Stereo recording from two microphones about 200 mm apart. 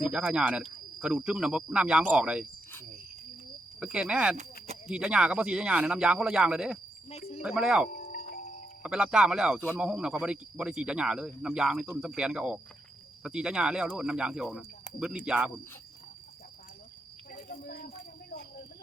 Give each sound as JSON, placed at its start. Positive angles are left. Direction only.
{"t": 0.0, "sound": "speech", "side_deg": -5}
{"t": 3.8, "sound": "speech", "side_deg": -5}
{"t": 4.4, "sound": "a sound", "side_deg": -30}
{"t": 4.9, "sound": "speech", "side_deg": -5}
{"t": 7.1, "sound": "cricket", "side_deg": 30}
{"t": 7.4, "sound": "speech", "side_deg": -5}
{"t": 7.9, "sound": "music", "side_deg": 45}
{"t": 8.8, "sound": "speech", "side_deg": -5}